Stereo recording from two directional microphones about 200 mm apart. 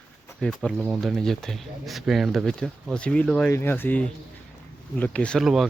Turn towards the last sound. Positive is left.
turn(degrees=0)  # may be behind; listen again after turning